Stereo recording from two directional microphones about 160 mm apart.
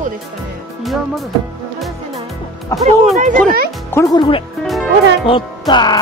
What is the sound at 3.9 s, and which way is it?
Speech, 25° left (ahead or behind).